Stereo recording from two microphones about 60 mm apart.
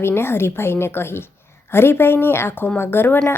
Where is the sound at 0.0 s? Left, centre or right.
Left.